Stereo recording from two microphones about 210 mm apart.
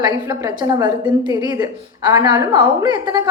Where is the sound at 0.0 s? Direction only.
15° right (ahead or behind).